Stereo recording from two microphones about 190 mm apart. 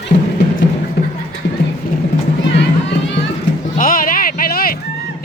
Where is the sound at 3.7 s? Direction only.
50° left (ahead or behind).